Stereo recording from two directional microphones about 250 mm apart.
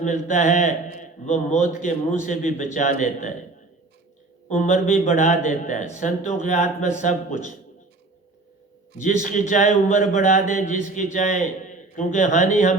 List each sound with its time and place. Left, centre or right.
0.0 s a man's voice: left
4.4 s a man's voice: left
9.2 s a man's voice: left